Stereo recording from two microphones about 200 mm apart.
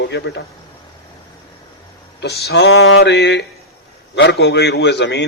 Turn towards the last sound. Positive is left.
turn(degrees=60)  # may be behind; listen again after turning